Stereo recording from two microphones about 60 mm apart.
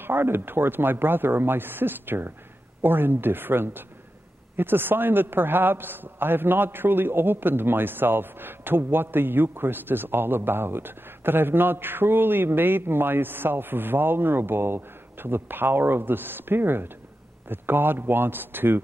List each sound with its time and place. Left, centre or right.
0.0 s a man's voice: right